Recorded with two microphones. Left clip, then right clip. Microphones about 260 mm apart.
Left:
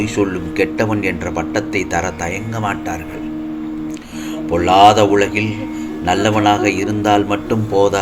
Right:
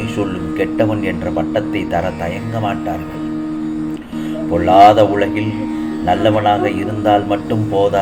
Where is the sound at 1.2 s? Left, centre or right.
Left.